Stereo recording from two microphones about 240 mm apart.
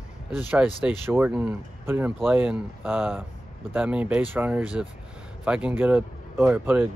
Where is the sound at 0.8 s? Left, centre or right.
Centre.